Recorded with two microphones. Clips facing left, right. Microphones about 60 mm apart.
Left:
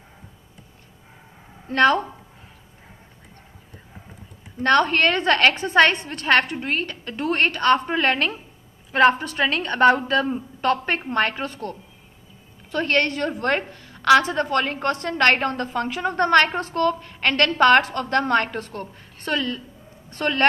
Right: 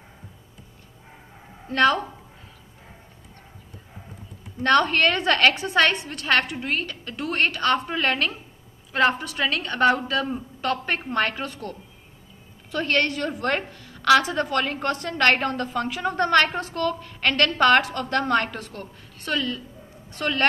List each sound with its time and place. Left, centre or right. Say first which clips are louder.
1.7 s a woman's voice: left 2 dB; left
4.6 s a woman's voice: left 1 dB; left
5.5 s a woman's voice: left 2 dB; left
5.8 s a woman's voice: left 4 dB; left
9.4 s a woman's voice: left 3 dB; left
12.7 s a woman's voice: left 2 dB; left